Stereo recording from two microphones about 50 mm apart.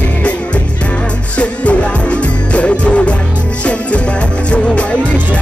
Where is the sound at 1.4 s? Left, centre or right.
Left.